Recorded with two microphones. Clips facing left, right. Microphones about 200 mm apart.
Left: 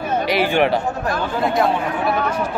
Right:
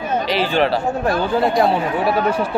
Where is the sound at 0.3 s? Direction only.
15° left (ahead or behind).